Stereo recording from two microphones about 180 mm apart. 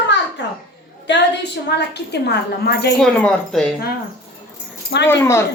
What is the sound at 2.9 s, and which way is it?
Speech, 5° left (ahead or behind).